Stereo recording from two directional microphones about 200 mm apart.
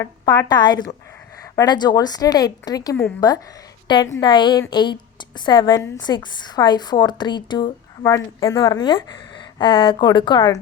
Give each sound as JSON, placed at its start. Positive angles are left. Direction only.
{"t": 0.0, "sound": "a woman's voice", "side_deg": 20}